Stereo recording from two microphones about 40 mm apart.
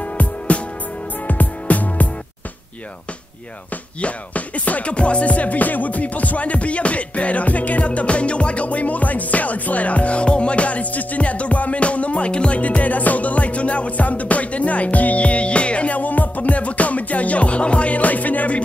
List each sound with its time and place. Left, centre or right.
0.5 s music: left
1.2 s music: left
4.0 s music: left